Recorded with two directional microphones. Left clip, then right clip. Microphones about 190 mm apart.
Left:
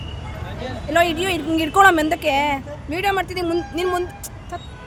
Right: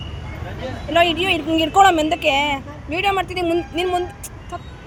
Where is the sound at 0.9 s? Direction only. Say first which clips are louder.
Right 2 dB; 25° left (ahead or behind).